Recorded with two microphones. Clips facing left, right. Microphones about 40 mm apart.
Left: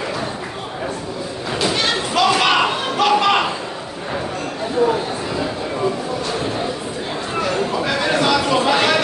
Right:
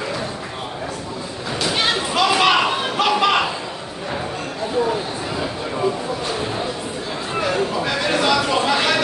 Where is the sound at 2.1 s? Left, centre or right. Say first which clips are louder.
Left 1 dB; centre.